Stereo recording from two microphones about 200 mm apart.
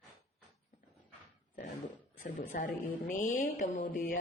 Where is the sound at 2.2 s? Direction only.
40° left (ahead or behind).